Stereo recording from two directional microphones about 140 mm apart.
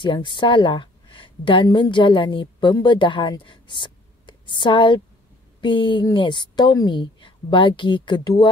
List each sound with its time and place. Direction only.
0.0 s a woman's voice: 35° left (ahead or behind)